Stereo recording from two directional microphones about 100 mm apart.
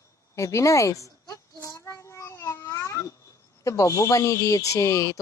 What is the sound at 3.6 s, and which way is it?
Speech, 30° left (ahead or behind).